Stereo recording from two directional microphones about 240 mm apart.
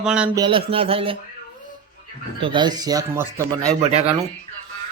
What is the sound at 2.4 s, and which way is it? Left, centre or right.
Speech, centre.